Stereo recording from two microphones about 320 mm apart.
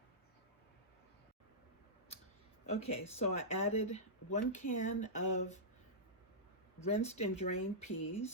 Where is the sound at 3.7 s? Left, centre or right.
Left.